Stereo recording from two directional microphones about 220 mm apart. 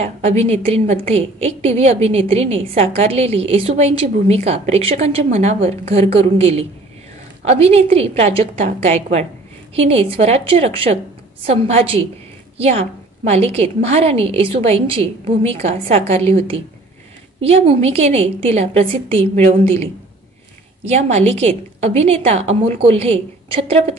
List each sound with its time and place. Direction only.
0.0 s a woman's voice: 30° right (ahead or behind)